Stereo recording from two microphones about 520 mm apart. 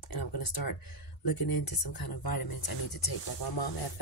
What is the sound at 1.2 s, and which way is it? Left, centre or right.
Speech, left.